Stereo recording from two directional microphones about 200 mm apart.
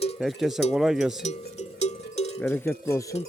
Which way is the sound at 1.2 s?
35° left (ahead or behind).